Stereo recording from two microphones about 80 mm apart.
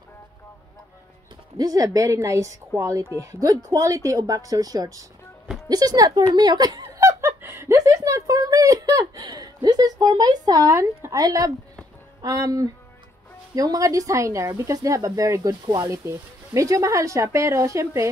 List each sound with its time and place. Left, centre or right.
1.6 s speech: right
7.0 s snicker: right
7.7 s a sound: right
10.8 s speech: right
11.1 s speech: right
16.5 s speech: right